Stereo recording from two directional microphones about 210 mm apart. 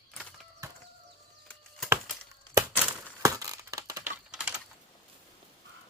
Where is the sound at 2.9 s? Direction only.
5° left (ahead or behind).